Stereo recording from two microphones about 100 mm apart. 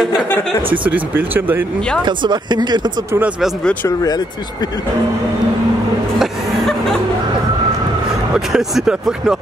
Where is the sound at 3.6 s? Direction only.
15° left (ahead or behind).